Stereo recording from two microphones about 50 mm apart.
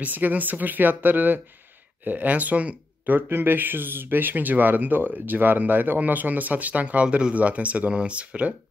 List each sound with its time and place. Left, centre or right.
0.0 s speech: right
3.2 s speech: right